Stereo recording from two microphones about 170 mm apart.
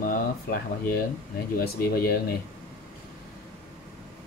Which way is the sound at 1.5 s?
65° left (ahead or behind).